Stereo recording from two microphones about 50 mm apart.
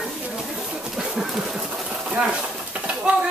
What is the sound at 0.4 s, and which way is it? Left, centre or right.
Sewing machine, centre.